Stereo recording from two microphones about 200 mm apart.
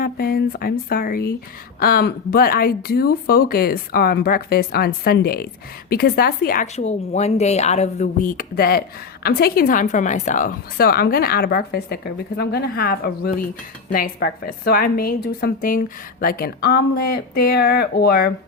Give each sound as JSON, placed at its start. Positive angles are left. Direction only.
{"t": 0.0, "sound": "a woman's voice", "side_deg": 50}
{"t": 6.7, "sound": "a woman's voice", "side_deg": 35}